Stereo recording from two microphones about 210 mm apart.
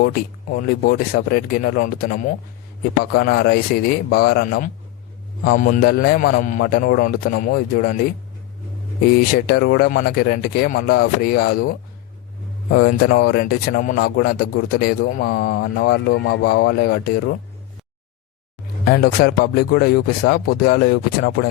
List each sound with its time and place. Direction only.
0.7 s a man's voice: 45° left (ahead or behind)
9.1 s speech: 45° left (ahead or behind)
12.9 s speech: 45° left (ahead or behind)
18.9 s speech: 50° left (ahead or behind)